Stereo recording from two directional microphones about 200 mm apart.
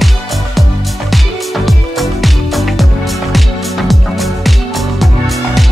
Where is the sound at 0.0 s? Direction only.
Centre (ahead or behind).